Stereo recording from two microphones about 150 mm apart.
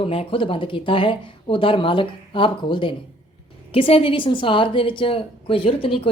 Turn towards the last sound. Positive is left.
turn(degrees=40)  # may be behind; listen again after turning